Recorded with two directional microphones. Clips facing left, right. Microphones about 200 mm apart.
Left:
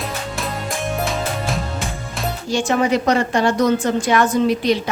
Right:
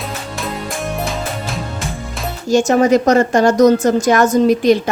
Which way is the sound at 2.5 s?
45° right (ahead or behind).